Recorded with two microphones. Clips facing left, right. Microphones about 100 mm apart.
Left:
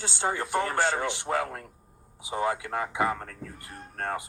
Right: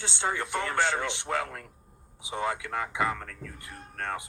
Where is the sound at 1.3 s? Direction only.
30° left (ahead or behind).